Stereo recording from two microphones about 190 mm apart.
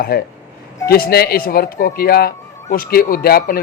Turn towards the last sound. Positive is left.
turn(degrees=50)  # may be behind; listen again after turning